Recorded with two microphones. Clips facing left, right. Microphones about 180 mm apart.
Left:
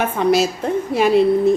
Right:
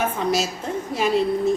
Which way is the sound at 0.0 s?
65° left (ahead or behind).